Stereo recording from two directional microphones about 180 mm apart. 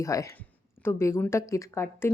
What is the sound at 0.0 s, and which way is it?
Speech, 20° left (ahead or behind).